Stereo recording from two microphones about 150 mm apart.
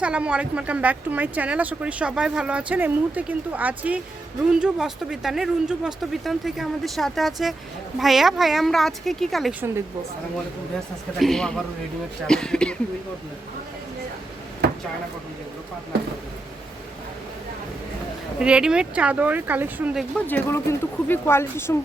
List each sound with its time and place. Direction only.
0.0 s speech: 10° right (ahead or behind)
11.2 s speech: 5° left (ahead or behind)
14.6 s drawer open or close: 90° right
18.3 s speech: 5° right (ahead or behind)
20.2 s speech: 15° left (ahead or behind)